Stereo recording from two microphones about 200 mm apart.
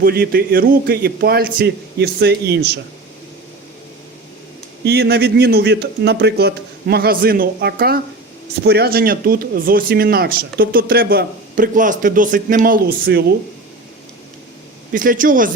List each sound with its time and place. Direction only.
0.0 s speech: 50° right (ahead or behind)
4.9 s speech: 55° right (ahead or behind)
14.9 s speech: 45° right (ahead or behind)